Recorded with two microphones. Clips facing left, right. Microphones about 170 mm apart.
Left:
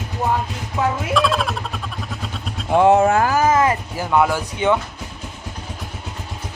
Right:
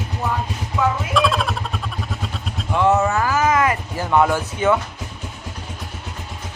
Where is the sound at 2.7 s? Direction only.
45° left (ahead or behind).